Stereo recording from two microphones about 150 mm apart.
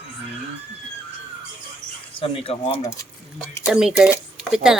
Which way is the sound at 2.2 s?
45° left (ahead or behind).